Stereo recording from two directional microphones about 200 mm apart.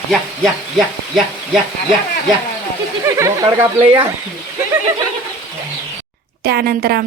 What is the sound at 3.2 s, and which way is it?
Speech, 15° right (ahead or behind).